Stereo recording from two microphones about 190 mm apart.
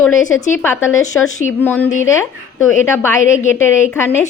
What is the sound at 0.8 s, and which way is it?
Speech, 90° left.